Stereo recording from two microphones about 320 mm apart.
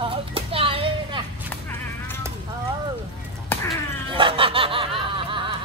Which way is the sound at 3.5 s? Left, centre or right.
Centre.